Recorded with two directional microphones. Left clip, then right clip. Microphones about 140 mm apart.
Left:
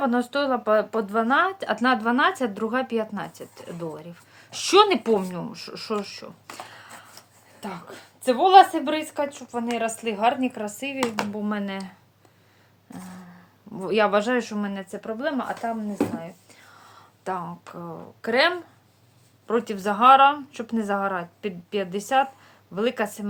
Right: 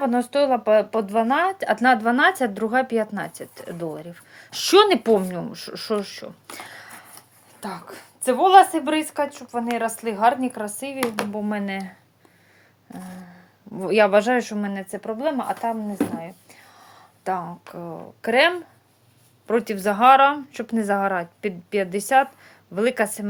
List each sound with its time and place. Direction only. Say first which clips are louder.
0.0 s speech: right 3 dB; 25° right (ahead or behind)
13.7 s a woman's voice: right 4 dB; 30° right (ahead or behind)